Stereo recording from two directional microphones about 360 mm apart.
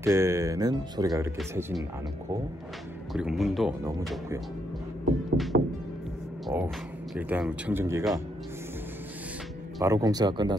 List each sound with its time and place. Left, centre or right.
0.0 s speech: centre
3.1 s speech: centre
5.5 s music: right
6.4 s music: centre
7.2 s speech: centre
9.8 s speech: centre